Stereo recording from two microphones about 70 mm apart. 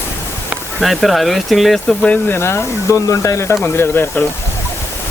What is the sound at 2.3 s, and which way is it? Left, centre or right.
Speech, left.